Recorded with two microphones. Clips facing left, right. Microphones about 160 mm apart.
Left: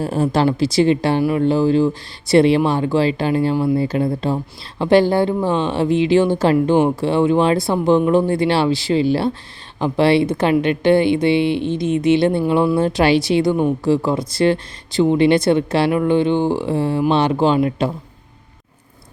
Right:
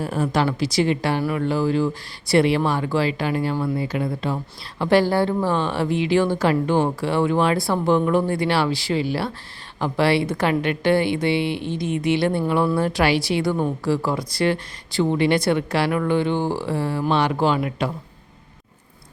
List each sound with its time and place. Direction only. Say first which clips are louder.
0.0 s speech: left 5 dB; 30° left (ahead or behind)